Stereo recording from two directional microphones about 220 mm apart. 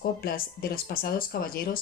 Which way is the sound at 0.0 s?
40° left (ahead or behind).